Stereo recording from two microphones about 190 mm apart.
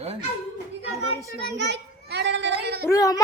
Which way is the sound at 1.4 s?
65° right (ahead or behind).